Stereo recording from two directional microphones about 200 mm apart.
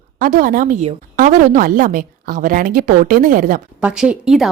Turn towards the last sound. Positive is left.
turn(degrees=0)  # may be behind; listen again after turning